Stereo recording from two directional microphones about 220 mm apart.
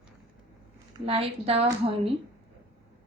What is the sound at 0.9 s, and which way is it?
Speech, 25° right (ahead or behind).